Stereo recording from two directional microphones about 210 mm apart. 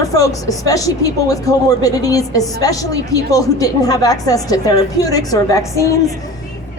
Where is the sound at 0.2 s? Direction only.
15° left (ahead or behind).